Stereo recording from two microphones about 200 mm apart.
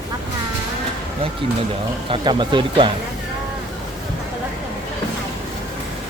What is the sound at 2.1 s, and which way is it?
Speech, 25° right (ahead or behind).